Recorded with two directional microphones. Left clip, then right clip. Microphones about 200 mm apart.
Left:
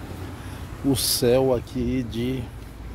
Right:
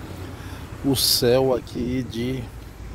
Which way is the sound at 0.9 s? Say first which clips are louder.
Right 2 dB; centre (ahead or behind).